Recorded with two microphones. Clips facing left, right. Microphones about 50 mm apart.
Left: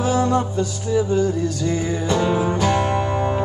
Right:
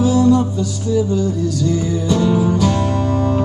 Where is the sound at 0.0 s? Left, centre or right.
Left.